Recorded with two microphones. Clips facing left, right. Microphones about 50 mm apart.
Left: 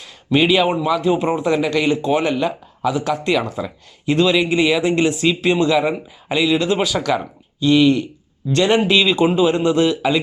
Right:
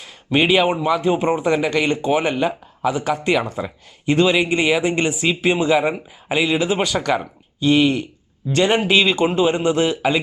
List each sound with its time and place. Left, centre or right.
0.0 s a man's voice: centre